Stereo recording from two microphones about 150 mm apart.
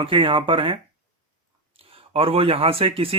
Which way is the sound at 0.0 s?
35° right (ahead or behind).